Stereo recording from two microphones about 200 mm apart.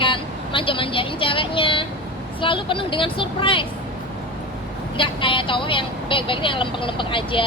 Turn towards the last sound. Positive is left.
turn(degrees=25)  # may be behind; listen again after turning